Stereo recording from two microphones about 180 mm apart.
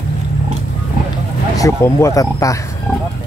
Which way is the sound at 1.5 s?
15° left (ahead or behind).